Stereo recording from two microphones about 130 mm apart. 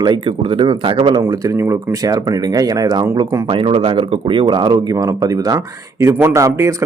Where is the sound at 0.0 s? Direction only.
40° right (ahead or behind).